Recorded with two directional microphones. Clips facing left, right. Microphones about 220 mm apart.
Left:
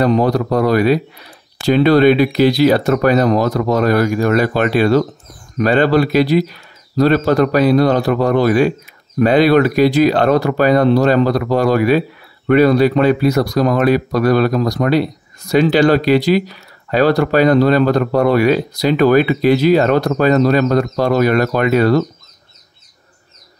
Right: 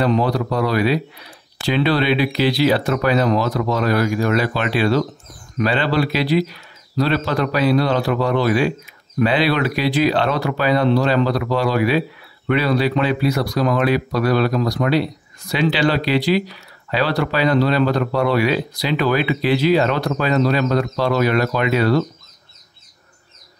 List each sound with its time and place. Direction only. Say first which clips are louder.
0.0 s speech: left 4 dB; 45° left (ahead or behind)